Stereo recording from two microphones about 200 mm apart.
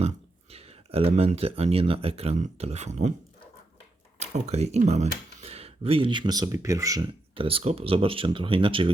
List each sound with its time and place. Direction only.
0.5 s speech: 30° right (ahead or behind)
4.2 s speech: 35° right (ahead or behind)